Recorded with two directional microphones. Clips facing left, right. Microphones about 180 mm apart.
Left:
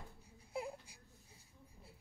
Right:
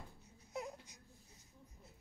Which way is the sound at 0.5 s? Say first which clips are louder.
Left 2 dB; 30° left (ahead or behind).